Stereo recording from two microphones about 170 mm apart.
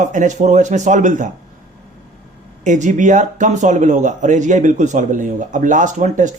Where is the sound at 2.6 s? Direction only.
45° right (ahead or behind).